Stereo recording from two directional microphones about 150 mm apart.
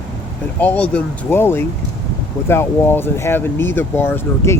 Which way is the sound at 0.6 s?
10° left (ahead or behind).